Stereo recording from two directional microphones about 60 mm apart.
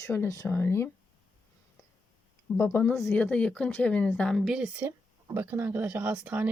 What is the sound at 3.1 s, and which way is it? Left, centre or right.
Speech, left.